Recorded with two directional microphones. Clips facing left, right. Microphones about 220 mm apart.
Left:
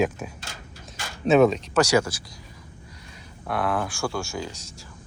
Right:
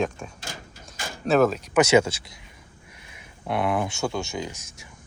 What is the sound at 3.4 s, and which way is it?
Speech, 20° right (ahead or behind).